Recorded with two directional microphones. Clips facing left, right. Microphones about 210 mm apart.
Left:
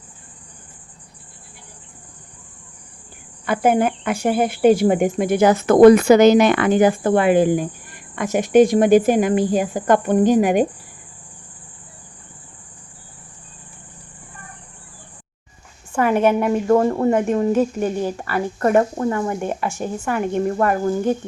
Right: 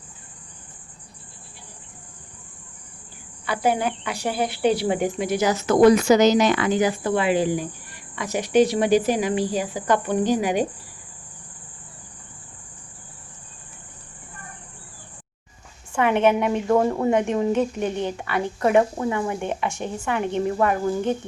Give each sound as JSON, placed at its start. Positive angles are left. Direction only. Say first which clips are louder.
{"t": 3.4, "sound": "speech", "louder": "left 5 dB", "side_deg": 50}
{"t": 15.9, "sound": "a woman's voice", "louder": "left 2 dB", "side_deg": 5}